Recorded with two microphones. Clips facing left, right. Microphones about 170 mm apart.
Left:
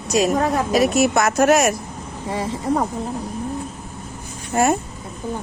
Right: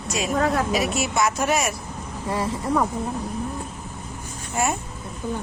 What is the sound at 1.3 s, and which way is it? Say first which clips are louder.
Speech: left 8 dB; 70° left (ahead or behind).